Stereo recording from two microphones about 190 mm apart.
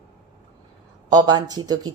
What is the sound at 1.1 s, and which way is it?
Speech, 20° right (ahead or behind).